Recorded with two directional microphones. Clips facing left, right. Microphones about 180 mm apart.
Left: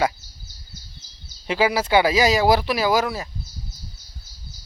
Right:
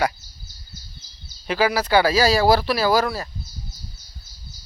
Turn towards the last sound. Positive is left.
turn(degrees=15)  # may be behind; listen again after turning